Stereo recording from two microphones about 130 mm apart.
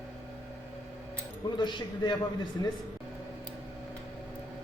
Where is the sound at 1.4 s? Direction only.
35° left (ahead or behind).